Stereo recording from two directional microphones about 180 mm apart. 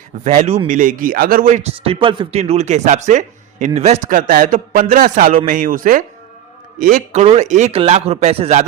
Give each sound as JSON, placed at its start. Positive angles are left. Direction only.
{"t": 0.3, "sound": "a man's voice", "side_deg": -35}
{"t": 1.7, "sound": "a man's voice", "side_deg": -30}